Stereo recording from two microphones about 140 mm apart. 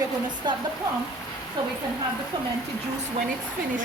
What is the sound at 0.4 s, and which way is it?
Speech, 30° right (ahead or behind).